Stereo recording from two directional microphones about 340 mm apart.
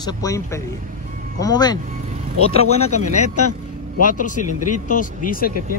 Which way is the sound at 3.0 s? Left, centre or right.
Left.